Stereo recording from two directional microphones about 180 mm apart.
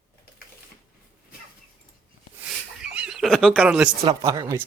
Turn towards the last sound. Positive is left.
turn(degrees=-20)  # may be behind; listen again after turning